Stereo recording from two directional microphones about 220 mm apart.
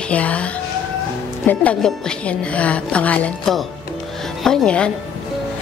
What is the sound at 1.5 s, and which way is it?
A woman's voice, 5° left (ahead or behind).